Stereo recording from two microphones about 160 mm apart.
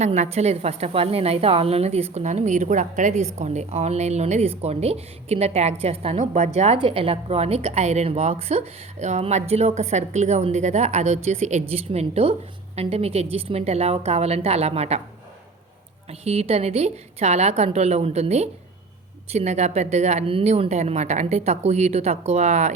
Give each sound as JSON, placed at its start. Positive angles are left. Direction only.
{"t": 0.0, "sound": "a woman's voice", "side_deg": -45}
{"t": 16.0, "sound": "a woman's voice", "side_deg": -40}